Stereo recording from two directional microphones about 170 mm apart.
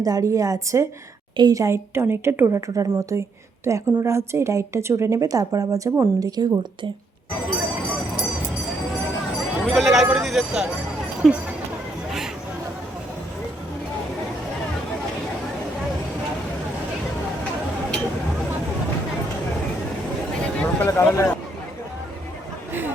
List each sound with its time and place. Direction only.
0.0 s a woman's voice: 20° right (ahead or behind)
9.6 s speech: centre (ahead or behind)
20.6 s a sound: 15° left (ahead or behind)